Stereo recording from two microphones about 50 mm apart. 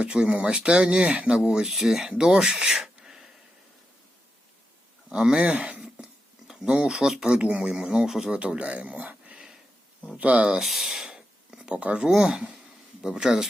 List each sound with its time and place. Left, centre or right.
0.0 s speech: centre
1.7 s speech: centre
5.0 s speech: centre
6.9 s speech: centre
8.4 s speech: right
10.6 s speech: centre